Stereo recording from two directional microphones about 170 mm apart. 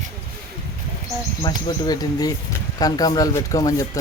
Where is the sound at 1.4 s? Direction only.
25° left (ahead or behind).